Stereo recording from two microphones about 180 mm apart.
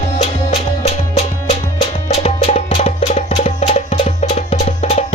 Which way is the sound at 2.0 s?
35° left (ahead or behind).